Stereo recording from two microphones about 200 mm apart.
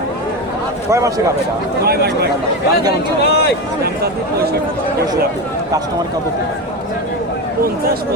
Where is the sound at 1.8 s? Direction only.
50° right (ahead or behind).